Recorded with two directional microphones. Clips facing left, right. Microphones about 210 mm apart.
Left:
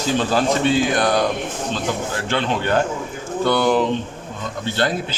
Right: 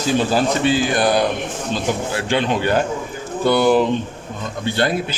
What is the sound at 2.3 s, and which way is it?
A man's voice, 10° right (ahead or behind).